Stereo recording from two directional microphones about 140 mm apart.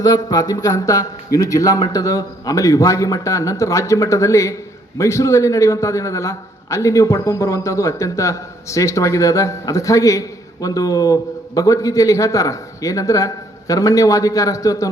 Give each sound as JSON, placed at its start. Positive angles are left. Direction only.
{"t": 0.0, "sound": "a man's voice", "side_deg": 30}